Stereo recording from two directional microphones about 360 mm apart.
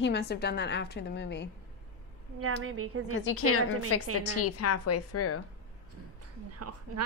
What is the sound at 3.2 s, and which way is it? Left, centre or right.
A woman's voice, left.